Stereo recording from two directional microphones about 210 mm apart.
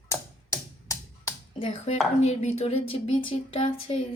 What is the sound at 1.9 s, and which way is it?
Speech, 30° left (ahead or behind).